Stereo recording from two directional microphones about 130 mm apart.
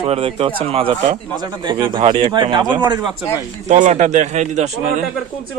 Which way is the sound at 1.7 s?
35° right (ahead or behind).